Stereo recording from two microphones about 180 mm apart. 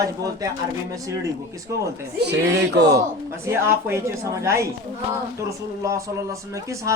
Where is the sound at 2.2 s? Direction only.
70° right (ahead or behind).